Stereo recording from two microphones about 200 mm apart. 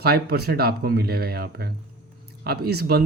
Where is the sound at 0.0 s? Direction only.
50° right (ahead or behind).